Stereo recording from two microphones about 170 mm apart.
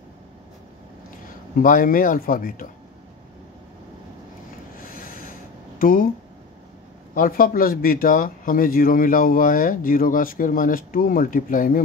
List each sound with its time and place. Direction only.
1.6 s speech: 55° left (ahead or behind)
4.7 s a sound: 55° left (ahead or behind)
5.8 s speech: 55° left (ahead or behind)
7.2 s speech: 55° left (ahead or behind)